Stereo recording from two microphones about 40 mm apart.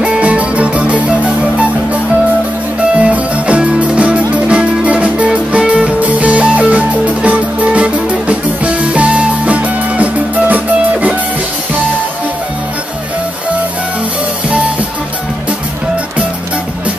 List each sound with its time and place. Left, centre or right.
0.0 s music: right
3.0 s music: right